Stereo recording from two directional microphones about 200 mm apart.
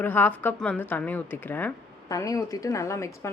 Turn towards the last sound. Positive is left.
turn(degrees=15)  # may be behind; listen again after turning